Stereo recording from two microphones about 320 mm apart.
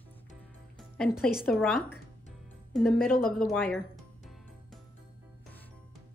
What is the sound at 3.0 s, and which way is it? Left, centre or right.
Speech, left.